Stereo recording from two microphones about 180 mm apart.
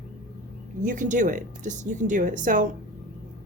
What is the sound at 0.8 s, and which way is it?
Speech, 45° right (ahead or behind).